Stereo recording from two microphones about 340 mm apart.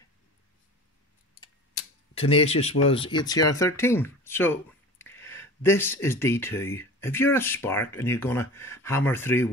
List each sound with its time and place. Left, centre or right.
2.1 s speech: centre